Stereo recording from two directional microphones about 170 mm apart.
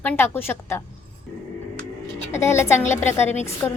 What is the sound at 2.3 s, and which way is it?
A woman's voice, 15° left (ahead or behind).